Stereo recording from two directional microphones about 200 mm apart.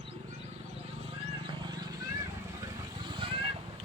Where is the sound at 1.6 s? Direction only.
20° right (ahead or behind).